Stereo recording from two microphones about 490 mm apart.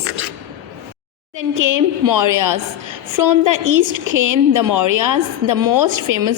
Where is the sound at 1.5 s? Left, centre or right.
Right.